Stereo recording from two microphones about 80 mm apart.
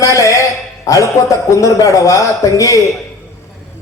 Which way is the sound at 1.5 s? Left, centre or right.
Left.